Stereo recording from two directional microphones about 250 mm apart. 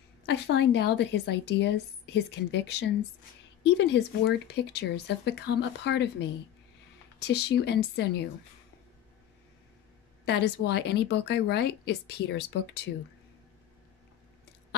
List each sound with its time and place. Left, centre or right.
0.3 s speech: left
10.2 s a woman's voice: left